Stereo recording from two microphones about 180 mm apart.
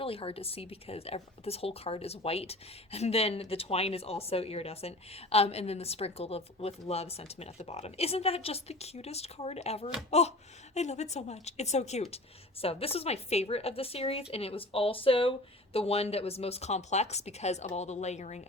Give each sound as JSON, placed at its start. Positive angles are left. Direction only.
{"t": 0.0, "sound": "a woman's voice", "side_deg": 30}